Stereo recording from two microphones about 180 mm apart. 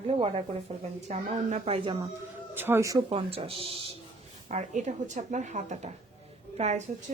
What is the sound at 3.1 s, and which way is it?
A woman's voice, 30° right (ahead or behind).